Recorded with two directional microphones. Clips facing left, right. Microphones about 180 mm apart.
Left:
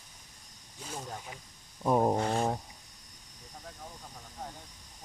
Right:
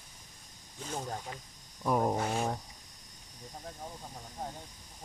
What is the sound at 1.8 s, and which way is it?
Speech, 30° left (ahead or behind).